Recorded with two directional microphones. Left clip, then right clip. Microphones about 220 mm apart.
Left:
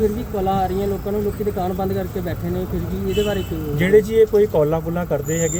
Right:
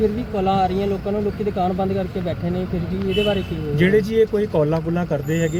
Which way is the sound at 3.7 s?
Centre (ahead or behind).